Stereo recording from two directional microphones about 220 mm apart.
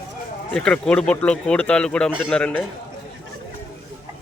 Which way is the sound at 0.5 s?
5° left (ahead or behind).